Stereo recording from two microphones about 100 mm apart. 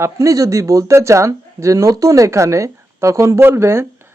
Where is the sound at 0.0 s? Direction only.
30° right (ahead or behind).